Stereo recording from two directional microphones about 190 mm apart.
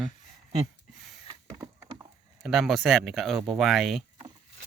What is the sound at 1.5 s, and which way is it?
Wood, 20° right (ahead or behind).